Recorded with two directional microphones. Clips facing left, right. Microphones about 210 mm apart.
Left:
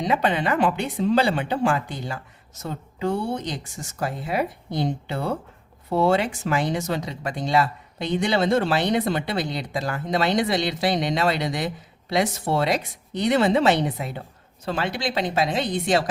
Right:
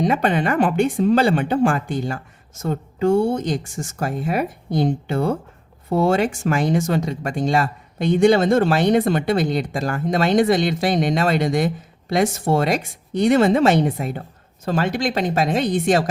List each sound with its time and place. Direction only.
0.0 s speech: 50° right (ahead or behind)